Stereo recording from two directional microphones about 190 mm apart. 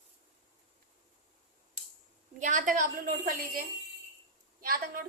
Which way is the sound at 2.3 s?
45° right (ahead or behind).